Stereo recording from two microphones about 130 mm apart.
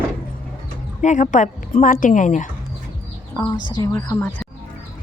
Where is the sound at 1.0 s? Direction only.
70° left (ahead or behind).